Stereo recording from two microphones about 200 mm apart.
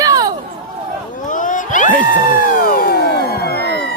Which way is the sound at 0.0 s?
20° right (ahead or behind).